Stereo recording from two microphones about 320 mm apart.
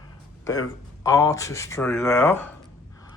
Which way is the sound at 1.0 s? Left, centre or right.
Centre.